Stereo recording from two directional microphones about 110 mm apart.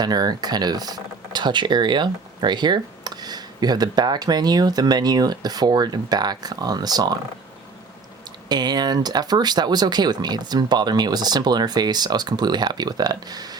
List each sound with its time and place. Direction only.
0.0 s speech: 40° right (ahead or behind)
8.4 s speech: 40° right (ahead or behind)